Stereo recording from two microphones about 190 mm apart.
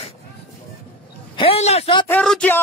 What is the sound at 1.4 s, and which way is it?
Speech, 30° left (ahead or behind).